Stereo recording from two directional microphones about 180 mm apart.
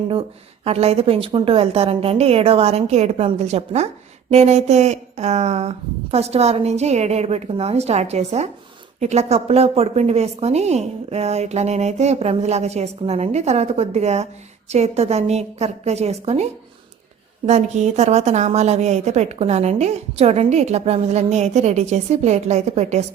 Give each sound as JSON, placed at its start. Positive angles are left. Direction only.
{"t": 0.1, "sound": "a woman's voice", "side_deg": -30}